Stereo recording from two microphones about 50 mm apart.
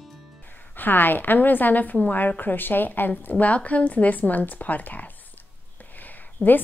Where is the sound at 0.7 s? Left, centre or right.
Left.